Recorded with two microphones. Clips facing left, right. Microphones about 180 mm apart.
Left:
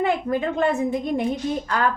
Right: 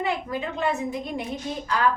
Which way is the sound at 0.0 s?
50° left (ahead or behind).